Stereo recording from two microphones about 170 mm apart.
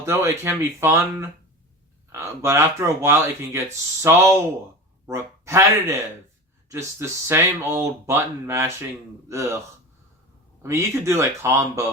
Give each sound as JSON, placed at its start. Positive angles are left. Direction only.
{"t": 0.0, "sound": "speech", "side_deg": -15}
{"t": 10.6, "sound": "speech", "side_deg": -15}